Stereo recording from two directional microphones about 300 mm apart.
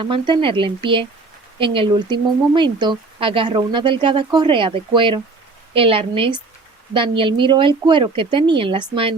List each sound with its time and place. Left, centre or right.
0.0 s speech: centre